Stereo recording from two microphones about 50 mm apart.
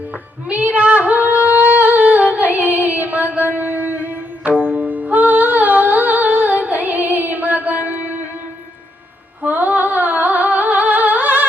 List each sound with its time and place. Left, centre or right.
0.5 s singing: right
9.4 s humming: right